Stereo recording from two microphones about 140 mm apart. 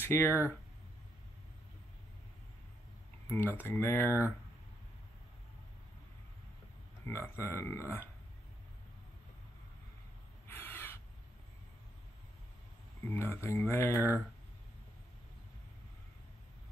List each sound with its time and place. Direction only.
0.0 s speech: 15° left (ahead or behind)
3.3 s speech: 15° left (ahead or behind)
7.1 s speech: 20° left (ahead or behind)
10.5 s owl: 15° left (ahead or behind)
13.0 s speech: 15° left (ahead or behind)